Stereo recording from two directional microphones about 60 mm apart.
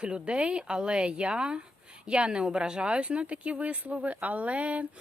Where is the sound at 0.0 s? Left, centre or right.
Centre.